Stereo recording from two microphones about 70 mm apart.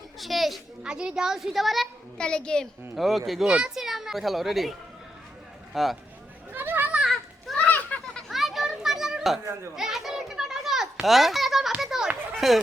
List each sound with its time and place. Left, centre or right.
0.2 s a child's voice: centre
0.8 s a child's voice: centre
2.1 s a child's voice: centre
2.9 s speech: centre
5.7 s speech: centre
6.5 s children playing: right
7.1 s children playing: centre
8.3 s children playing: centre
11.8 s a sound: centre